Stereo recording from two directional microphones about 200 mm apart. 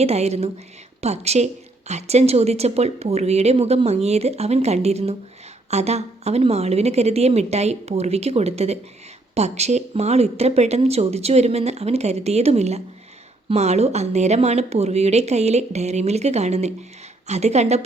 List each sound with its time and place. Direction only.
0.0 s speech: 30° right (ahead or behind)